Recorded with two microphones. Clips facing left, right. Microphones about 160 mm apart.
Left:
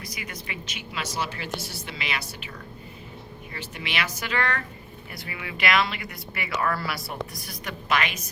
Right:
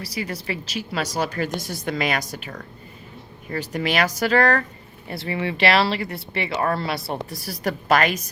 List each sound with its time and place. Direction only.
0.0 s a woman's voice: 35° right (ahead or behind)
3.5 s a woman's voice: 40° right (ahead or behind); by 7.0 s 25° right (ahead or behind)
7.4 s a woman's voice: 35° right (ahead or behind)